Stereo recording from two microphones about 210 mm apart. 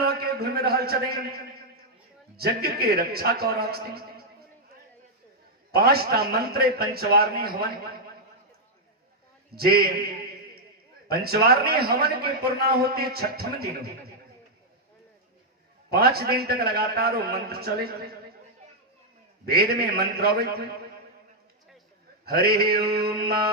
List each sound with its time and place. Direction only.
0.0 s a man's voice: 45° right (ahead or behind)
2.3 s a man's voice: 45° right (ahead or behind)
5.7 s a man's voice: 45° right (ahead or behind)
9.6 s a man's voice: 45° right (ahead or behind)
11.1 s a man's voice: 50° right (ahead or behind)
15.9 s a man's voice: 50° right (ahead or behind)
19.5 s a man's voice: 45° right (ahead or behind)
22.3 s a man's voice: 45° right (ahead or behind)